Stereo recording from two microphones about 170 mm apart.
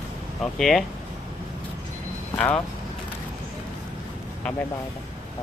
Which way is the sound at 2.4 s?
5° left (ahead or behind).